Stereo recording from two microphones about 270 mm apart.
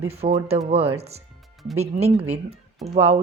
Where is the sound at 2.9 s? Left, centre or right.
Right.